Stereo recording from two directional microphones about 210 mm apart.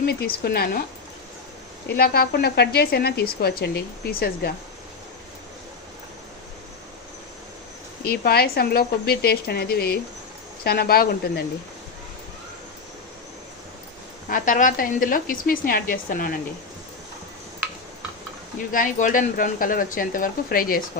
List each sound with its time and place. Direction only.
0.0 s speech: 50° left (ahead or behind)
2.0 s speech: 45° left (ahead or behind)
8.1 s speech: 45° left (ahead or behind)
14.3 s speech: 40° left (ahead or behind)
18.7 s speech: 40° left (ahead or behind)